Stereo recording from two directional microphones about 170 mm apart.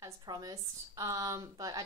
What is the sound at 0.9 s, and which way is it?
Female singing, 20° right (ahead or behind).